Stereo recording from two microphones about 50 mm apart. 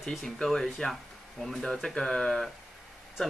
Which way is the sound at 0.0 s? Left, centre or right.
Centre.